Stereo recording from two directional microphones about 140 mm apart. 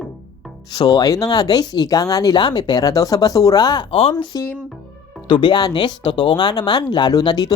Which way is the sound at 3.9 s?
45° left (ahead or behind).